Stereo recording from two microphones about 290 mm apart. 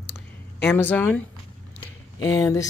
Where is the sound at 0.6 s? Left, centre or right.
Centre.